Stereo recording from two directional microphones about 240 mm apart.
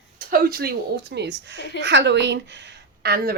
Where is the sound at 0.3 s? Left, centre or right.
Right.